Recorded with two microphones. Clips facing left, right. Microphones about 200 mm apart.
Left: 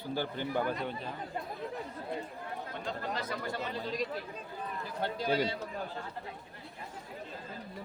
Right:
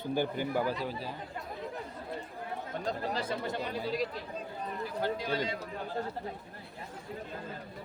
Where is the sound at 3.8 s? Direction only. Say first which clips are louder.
Right 3 dB; 5° right (ahead or behind).